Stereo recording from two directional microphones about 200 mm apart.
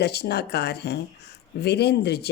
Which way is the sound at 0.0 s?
55° left (ahead or behind).